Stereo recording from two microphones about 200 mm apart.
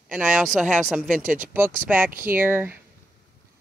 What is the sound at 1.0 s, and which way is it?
Speech, 40° right (ahead or behind).